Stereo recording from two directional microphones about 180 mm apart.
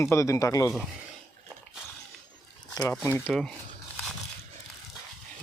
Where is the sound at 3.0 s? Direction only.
15° left (ahead or behind).